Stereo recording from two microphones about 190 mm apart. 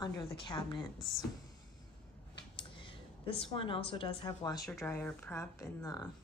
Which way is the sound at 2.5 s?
25° left (ahead or behind).